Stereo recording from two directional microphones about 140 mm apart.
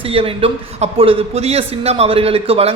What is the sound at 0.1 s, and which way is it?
A man's voice, 40° right (ahead or behind).